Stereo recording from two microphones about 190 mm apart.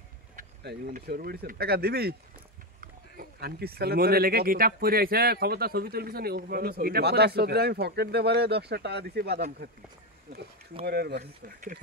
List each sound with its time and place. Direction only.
0.4 s speech: 50° right (ahead or behind)
10.9 s speech: 60° right (ahead or behind)